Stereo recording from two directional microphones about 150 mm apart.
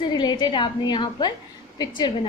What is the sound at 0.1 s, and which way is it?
A woman's voice, 30° left (ahead or behind).